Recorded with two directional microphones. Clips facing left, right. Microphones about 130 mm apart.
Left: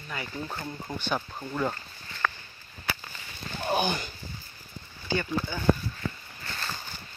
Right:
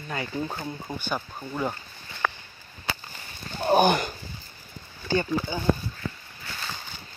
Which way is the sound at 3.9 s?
65° right (ahead or behind).